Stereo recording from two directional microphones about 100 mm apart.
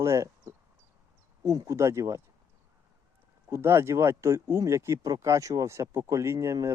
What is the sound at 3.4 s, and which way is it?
Speech, 25° right (ahead or behind).